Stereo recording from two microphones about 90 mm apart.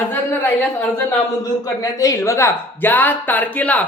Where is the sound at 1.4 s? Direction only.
40° left (ahead or behind).